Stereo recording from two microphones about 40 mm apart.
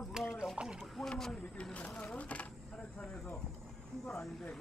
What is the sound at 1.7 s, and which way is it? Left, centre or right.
Speech, left.